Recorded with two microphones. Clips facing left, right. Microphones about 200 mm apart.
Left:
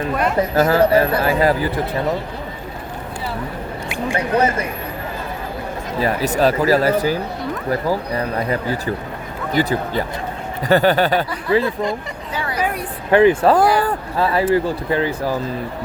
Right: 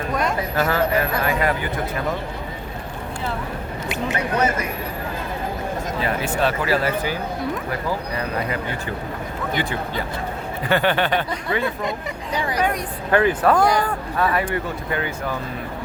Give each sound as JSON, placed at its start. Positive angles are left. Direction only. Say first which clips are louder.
{"t": 0.1, "sound": "a sound", "louder": "left 1 dB", "side_deg": 5}
{"t": 0.5, "sound": "speech", "louder": "left 7 dB", "side_deg": 40}
{"t": 4.4, "sound": "speech", "louder": "left 4 dB", "side_deg": 30}
{"t": 6.0, "sound": "speech", "louder": "left 6 dB", "side_deg": 40}
{"t": 12.3, "sound": "speech", "louder": "right 1 dB", "side_deg": -15}
{"t": 13.1, "sound": "speech", "louder": "left 5 dB", "side_deg": 20}